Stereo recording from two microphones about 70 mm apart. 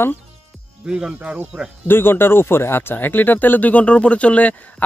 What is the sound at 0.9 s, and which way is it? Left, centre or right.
Speech, centre.